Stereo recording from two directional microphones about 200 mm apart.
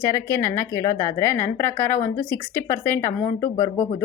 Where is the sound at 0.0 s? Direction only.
15° left (ahead or behind).